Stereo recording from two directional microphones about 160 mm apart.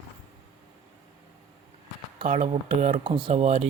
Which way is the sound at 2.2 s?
35° right (ahead or behind).